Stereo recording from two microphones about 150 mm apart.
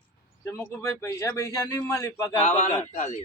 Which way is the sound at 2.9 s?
50° left (ahead or behind).